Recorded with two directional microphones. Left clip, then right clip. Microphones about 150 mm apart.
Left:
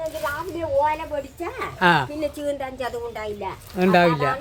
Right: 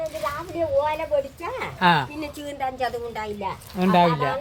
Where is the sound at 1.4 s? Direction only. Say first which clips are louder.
Left 3 dB; 30° left (ahead or behind).